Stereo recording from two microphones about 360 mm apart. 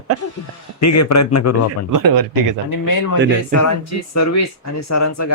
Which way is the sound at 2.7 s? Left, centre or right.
Left.